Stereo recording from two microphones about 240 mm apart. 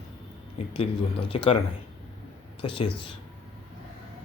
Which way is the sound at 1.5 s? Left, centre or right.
Left.